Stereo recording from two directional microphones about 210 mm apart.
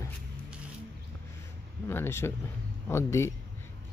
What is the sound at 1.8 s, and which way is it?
Speech, 10° left (ahead or behind).